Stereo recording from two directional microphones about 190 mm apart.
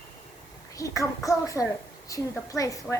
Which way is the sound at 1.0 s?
15° left (ahead or behind).